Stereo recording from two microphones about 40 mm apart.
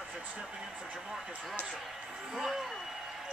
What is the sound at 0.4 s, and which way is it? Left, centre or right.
Speech, right.